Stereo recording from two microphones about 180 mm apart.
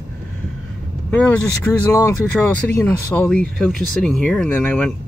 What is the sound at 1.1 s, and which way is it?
Speech, 10° left (ahead or behind).